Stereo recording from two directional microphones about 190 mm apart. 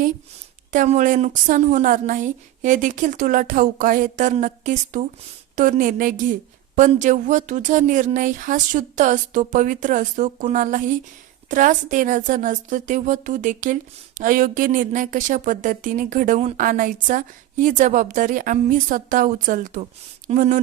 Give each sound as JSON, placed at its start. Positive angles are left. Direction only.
{"t": 0.7, "sound": "speech", "side_deg": -40}